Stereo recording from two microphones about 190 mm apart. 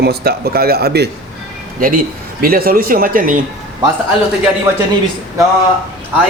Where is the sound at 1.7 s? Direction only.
45° right (ahead or behind).